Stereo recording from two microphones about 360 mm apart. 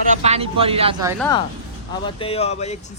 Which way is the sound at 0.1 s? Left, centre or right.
Centre.